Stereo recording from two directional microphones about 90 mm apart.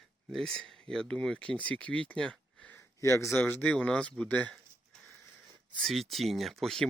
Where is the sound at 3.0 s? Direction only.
35° left (ahead or behind).